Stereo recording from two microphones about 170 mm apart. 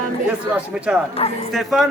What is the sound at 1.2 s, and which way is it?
Speech, 35° left (ahead or behind).